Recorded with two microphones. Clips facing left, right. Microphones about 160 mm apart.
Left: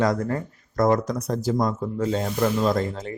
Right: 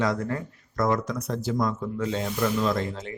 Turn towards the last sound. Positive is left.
turn(degrees=40)  # may be behind; listen again after turning